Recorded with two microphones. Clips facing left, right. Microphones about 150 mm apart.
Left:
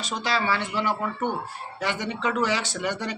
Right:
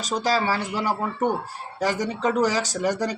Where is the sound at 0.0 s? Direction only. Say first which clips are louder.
Right 4 dB; 40° right (ahead or behind).